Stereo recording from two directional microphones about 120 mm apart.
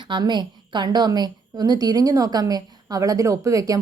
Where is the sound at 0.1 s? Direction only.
35° right (ahead or behind).